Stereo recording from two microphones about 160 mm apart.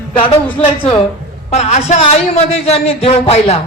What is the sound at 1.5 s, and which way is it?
A man's voice, 40° left (ahead or behind).